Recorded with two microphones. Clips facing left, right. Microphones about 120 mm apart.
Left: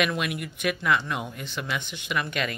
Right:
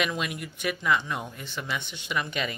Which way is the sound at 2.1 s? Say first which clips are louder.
Left 1 dB; 15° right (ahead or behind).